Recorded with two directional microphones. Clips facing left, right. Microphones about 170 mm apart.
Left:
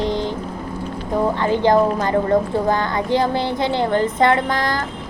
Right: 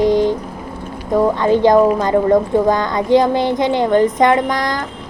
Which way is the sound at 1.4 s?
15° right (ahead or behind).